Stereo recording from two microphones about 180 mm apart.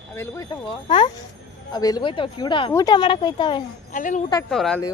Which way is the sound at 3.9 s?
45° left (ahead or behind).